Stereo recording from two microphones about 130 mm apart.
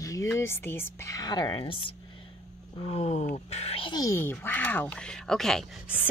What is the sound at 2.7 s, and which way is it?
Speech, 50° left (ahead or behind).